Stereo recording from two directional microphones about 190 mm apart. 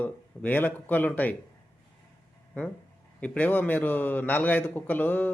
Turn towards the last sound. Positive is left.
turn(degrees=10)  # may be behind; listen again after turning